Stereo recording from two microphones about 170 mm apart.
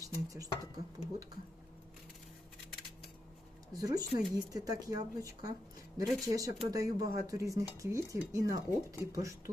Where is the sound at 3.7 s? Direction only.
20° right (ahead or behind).